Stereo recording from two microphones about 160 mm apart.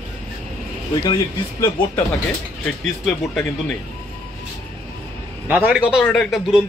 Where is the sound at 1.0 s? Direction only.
25° left (ahead or behind).